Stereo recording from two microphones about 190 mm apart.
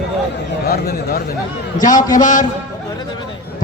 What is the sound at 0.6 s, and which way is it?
Speech, 55° left (ahead or behind).